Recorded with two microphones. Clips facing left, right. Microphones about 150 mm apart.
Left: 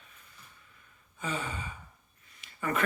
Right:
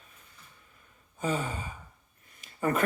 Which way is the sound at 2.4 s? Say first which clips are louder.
Right 4 dB; 40° right (ahead or behind).